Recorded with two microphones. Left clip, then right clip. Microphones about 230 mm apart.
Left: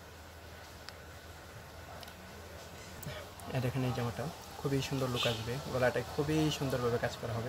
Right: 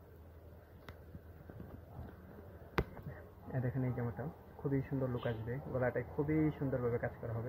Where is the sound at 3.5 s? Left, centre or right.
Left.